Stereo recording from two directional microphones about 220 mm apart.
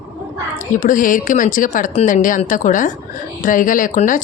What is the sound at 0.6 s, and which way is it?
Speech, 35° left (ahead or behind).